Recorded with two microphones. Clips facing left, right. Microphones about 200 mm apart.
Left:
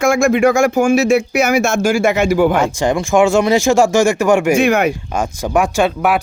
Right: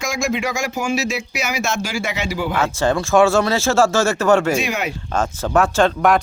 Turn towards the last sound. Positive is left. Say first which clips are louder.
# left 1 dB
turn(degrees=10)  # may be behind; listen again after turning